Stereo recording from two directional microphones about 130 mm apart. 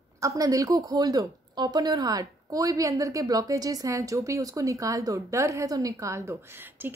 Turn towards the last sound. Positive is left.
turn(degrees=-15)  # may be behind; listen again after turning